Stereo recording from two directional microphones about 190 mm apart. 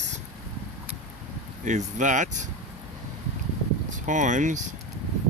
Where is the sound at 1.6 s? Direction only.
40° right (ahead or behind).